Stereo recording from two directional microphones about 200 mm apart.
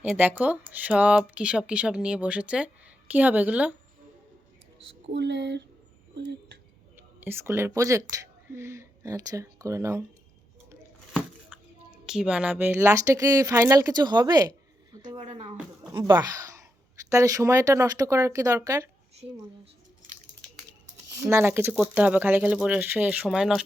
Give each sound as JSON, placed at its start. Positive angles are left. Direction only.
{"t": 0.0, "sound": "speech", "side_deg": -10}
{"t": 5.1, "sound": "speech", "side_deg": -60}
{"t": 6.9, "sound": "speech", "side_deg": -10}
{"t": 11.1, "sound": "speech", "side_deg": -5}
{"t": 14.9, "sound": "a sound", "side_deg": -20}
{"t": 15.9, "sound": "speech", "side_deg": -15}
{"t": 21.2, "sound": "speech", "side_deg": -10}